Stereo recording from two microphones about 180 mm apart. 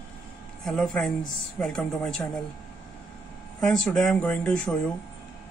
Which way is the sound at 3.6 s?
Centre (ahead or behind).